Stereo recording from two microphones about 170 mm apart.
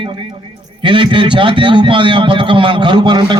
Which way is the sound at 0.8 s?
30° right (ahead or behind).